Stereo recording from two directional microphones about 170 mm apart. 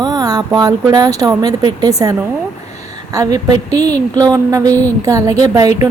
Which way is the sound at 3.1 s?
20° right (ahead or behind).